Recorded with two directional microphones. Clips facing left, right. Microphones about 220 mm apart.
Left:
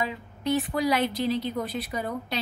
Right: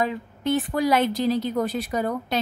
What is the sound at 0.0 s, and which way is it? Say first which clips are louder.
A woman's voice: right 5 dB; 50° right (ahead or behind).